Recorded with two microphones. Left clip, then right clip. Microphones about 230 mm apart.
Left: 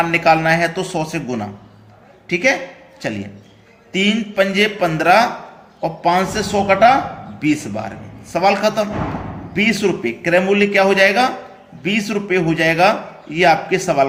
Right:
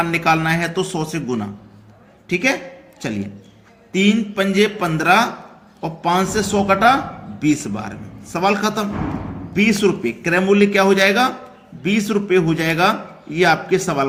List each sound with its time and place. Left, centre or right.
0.0 s a woman's voice: right